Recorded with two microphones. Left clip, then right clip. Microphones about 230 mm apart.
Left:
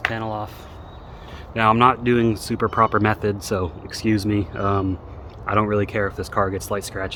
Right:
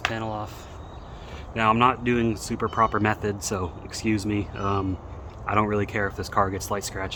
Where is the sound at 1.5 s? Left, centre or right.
Left.